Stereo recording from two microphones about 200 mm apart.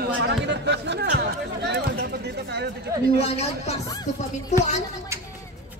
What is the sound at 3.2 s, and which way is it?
Speech, 30° left (ahead or behind).